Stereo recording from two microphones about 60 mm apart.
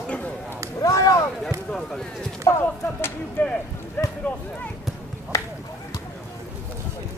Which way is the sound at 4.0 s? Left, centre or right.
Left.